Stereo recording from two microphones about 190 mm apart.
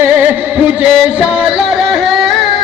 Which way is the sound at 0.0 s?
10° right (ahead or behind).